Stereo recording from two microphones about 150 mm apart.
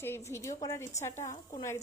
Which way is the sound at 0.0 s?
15° left (ahead or behind).